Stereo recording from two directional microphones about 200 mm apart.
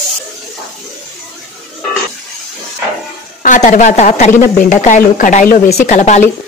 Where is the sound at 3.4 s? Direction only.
40° left (ahead or behind).